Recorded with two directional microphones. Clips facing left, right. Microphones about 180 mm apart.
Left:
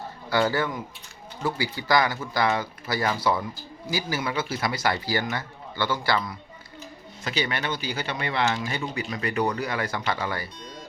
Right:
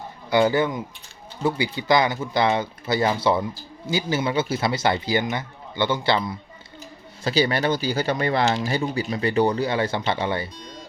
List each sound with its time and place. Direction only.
0.3 s speech: 20° right (ahead or behind)
7.3 s speech: 35° right (ahead or behind)